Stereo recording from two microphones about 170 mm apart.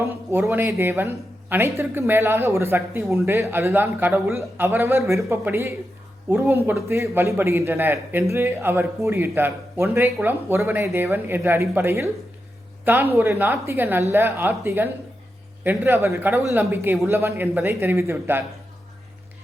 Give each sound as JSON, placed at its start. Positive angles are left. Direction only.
{"t": 0.0, "sound": "a man's voice", "side_deg": -15}